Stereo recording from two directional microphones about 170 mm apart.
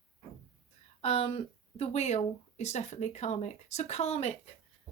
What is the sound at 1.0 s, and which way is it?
Speech, 35° left (ahead or behind).